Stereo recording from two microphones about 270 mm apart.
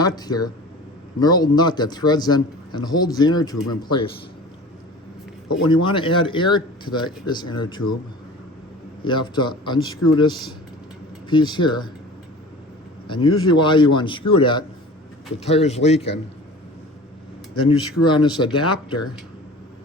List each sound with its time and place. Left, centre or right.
0.0 s a man's voice: centre
5.6 s a man's voice: centre
9.0 s a man's voice: centre
13.1 s a man's voice: centre
17.5 s a man's voice: centre